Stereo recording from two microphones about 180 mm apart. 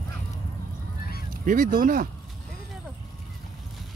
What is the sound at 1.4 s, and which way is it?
Speech, 50° right (ahead or behind).